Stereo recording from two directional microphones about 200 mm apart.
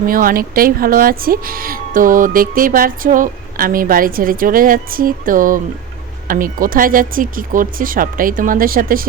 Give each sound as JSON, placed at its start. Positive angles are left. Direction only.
{"t": 0.0, "sound": "speech", "side_deg": -45}